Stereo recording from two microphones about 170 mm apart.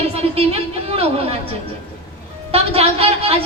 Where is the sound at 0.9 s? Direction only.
35° right (ahead or behind).